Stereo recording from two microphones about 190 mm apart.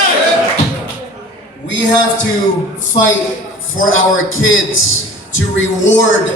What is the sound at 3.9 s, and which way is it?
Speech, 90° left.